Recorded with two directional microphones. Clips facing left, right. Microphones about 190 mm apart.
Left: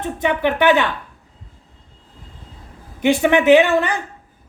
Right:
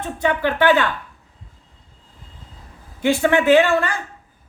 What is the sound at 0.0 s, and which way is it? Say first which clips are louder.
Speech: left 1 dB; 20° left (ahead or behind).